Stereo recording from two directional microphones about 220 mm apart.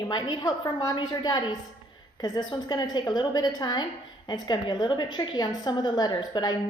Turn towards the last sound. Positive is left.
turn(degrees=20)  # may be behind; listen again after turning